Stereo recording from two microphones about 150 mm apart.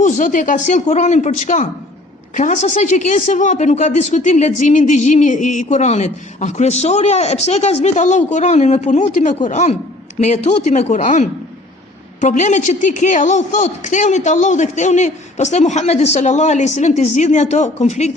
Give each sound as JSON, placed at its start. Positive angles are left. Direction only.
{"t": 0.0, "sound": "speech", "side_deg": 60}